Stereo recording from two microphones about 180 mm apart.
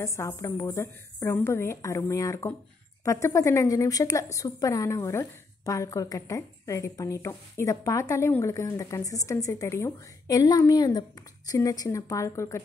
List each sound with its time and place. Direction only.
0.0 s a woman's voice: 15° left (ahead or behind)